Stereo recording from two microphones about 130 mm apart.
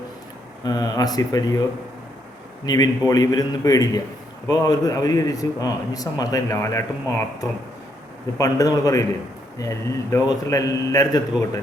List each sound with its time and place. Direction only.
0.6 s a man's voice: 30° left (ahead or behind)
2.6 s a man's voice: 30° left (ahead or behind)
8.4 s a man's voice: 25° left (ahead or behind)